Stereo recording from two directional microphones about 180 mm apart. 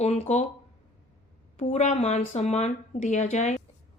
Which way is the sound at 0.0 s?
35° left (ahead or behind).